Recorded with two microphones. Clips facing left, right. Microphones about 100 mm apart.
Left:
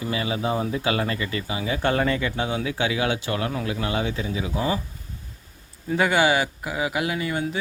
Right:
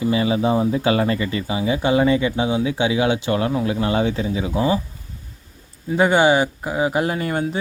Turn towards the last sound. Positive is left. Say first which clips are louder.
# right 5 dB
turn(degrees=-45)  # may be behind; listen again after turning